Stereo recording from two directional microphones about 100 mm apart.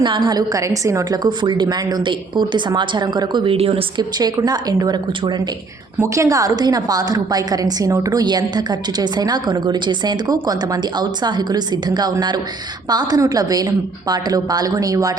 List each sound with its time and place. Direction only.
0.0 s a woman's voice: 45° right (ahead or behind)
3.5 s speech: 75° right (ahead or behind)
4.4 s a woman's voice: 40° right (ahead or behind)